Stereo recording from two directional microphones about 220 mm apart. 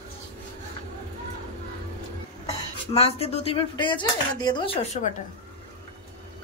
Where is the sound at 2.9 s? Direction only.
25° left (ahead or behind).